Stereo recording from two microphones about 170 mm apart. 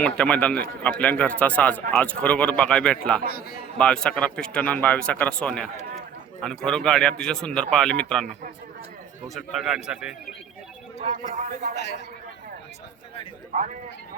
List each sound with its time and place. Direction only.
0.0 s speech: 5° left (ahead or behind)
11.0 s a man's voice: 50° right (ahead or behind)
11.7 s speech: 75° left (ahead or behind)